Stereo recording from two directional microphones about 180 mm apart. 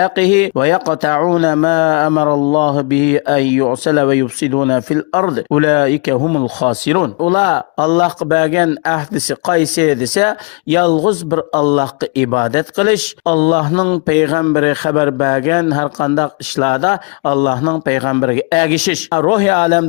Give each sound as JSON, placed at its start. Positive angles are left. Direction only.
{"t": 0.0, "sound": "speech", "side_deg": 40}